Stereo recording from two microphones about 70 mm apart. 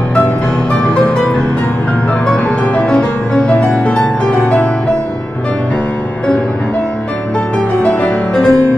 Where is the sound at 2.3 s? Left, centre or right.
Centre.